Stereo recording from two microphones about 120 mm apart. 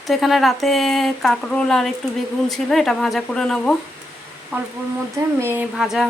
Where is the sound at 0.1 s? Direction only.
Centre (ahead or behind).